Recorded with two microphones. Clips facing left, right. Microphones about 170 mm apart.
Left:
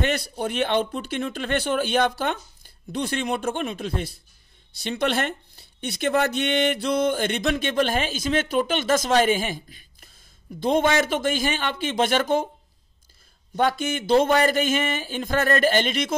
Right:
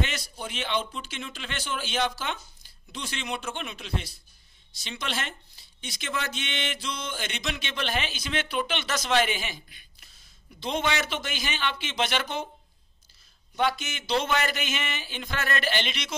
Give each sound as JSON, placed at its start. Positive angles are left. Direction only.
{"t": 0.0, "sound": "speech", "side_deg": 55}
{"t": 13.6, "sound": "speech", "side_deg": 50}